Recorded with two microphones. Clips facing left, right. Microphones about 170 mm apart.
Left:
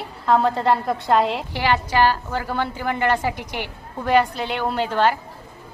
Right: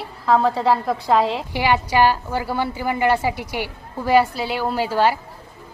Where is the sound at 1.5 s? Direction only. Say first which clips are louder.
Right 2 dB; 10° right (ahead or behind).